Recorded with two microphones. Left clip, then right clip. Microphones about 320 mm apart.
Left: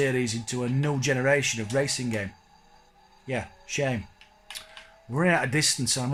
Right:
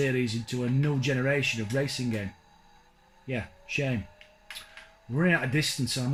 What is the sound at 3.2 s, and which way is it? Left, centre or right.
Speech, centre.